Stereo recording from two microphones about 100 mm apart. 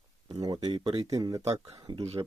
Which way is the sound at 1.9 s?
50° right (ahead or behind).